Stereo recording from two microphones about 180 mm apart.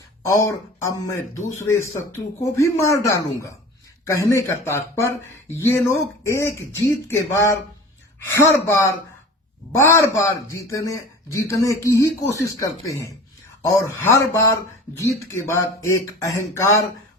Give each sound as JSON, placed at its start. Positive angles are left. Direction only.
{"t": 0.2, "sound": "speech", "side_deg": 15}